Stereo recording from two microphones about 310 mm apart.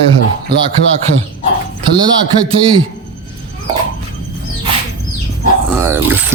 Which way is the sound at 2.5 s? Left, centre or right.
Centre.